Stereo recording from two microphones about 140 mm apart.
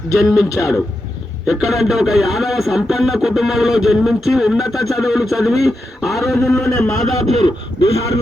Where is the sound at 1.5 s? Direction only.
5° right (ahead or behind).